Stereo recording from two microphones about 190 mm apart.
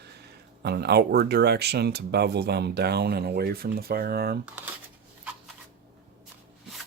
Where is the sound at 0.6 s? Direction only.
60° right (ahead or behind).